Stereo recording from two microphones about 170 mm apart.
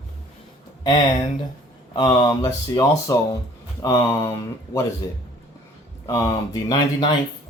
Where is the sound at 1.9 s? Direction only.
25° left (ahead or behind).